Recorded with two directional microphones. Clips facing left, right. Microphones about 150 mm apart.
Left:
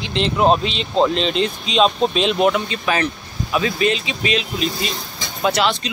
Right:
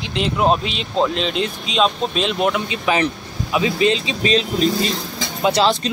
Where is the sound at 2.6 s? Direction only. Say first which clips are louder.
Right 2 dB; 15° right (ahead or behind).